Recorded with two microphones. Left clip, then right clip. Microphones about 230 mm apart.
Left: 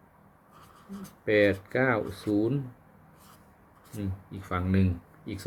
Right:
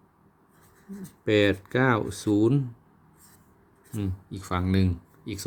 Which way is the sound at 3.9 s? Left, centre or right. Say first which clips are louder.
Right 4 dB; right.